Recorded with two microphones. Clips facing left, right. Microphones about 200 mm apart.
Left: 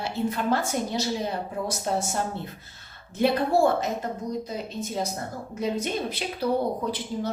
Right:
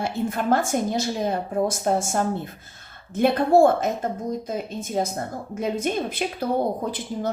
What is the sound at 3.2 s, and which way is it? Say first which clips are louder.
Speech: right 5 dB; 50° right (ahead or behind).